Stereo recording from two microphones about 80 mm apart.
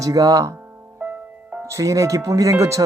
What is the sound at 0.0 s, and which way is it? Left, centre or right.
Speech, right.